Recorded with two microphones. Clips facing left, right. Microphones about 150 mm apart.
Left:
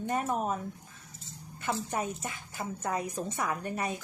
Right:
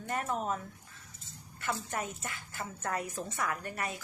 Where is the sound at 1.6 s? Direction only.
20° left (ahead or behind).